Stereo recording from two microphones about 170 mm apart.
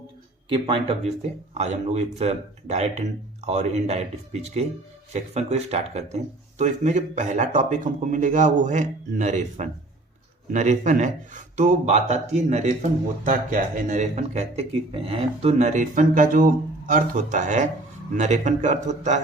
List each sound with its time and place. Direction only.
0.4 s speech: 30° right (ahead or behind)